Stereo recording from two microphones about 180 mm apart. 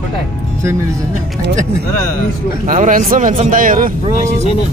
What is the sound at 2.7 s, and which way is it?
Speech, 45° right (ahead or behind).